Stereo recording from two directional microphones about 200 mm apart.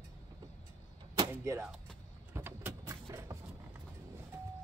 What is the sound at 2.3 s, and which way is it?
Vehicle, 10° right (ahead or behind).